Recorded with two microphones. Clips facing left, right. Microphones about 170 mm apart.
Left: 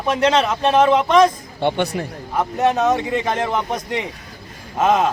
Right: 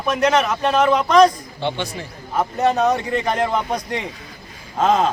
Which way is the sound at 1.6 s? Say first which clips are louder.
Left 5 dB; 55° left (ahead or behind).